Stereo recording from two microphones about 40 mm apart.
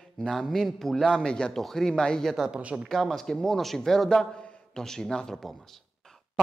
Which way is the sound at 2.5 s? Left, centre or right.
Right.